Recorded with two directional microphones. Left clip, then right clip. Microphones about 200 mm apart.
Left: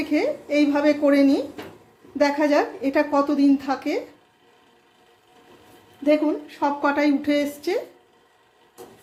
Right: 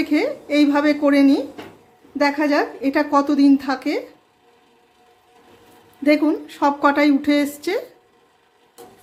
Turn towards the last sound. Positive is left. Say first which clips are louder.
# right 3 dB
turn(degrees=-25)  # may be behind; listen again after turning